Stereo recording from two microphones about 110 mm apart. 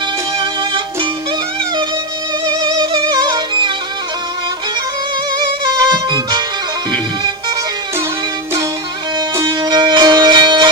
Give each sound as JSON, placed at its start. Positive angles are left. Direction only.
{"t": 2.5, "sound": "music", "side_deg": -40}
{"t": 5.7, "sound": "music", "side_deg": -40}
{"t": 9.5, "sound": "music", "side_deg": -40}